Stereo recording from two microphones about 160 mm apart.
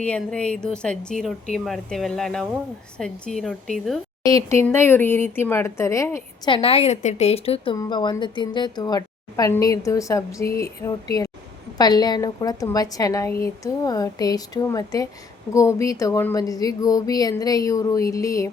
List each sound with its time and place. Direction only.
0.0 s a woman's voice: 5° left (ahead or behind)
4.3 s speech: 20° left (ahead or behind)
6.5 s a woman's voice: 35° left (ahead or behind); by 18.5 s 20° left (ahead or behind)